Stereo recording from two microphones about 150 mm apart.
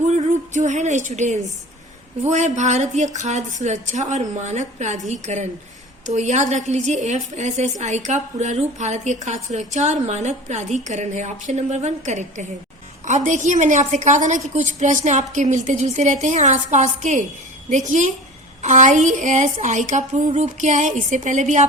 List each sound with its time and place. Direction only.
0.1 s a woman's voice: 50° right (ahead or behind)